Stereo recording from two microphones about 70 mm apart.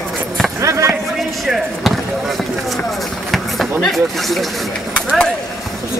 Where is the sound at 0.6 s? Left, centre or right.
Right.